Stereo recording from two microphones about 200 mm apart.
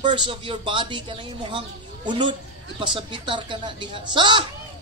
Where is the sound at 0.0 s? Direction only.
25° right (ahead or behind).